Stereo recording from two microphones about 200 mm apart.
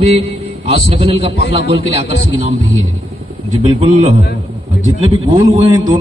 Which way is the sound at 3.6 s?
25° right (ahead or behind).